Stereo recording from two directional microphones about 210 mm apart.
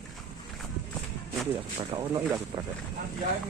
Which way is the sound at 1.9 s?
25° right (ahead or behind).